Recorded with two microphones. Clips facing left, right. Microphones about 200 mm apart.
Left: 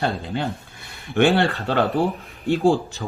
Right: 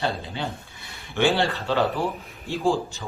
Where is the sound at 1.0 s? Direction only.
55° left (ahead or behind).